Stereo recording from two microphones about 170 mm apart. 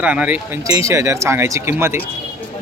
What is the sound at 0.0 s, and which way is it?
Speech, 10° right (ahead or behind).